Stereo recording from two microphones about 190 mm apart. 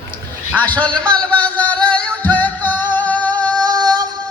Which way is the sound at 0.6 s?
10° left (ahead or behind).